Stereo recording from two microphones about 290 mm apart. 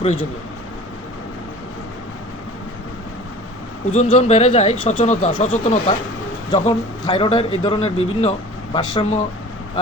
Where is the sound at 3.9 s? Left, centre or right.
Left.